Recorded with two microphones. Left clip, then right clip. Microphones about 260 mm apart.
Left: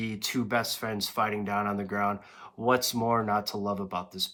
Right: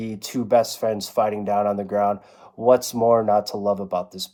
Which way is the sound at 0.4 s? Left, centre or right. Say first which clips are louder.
Right 13 dB; left.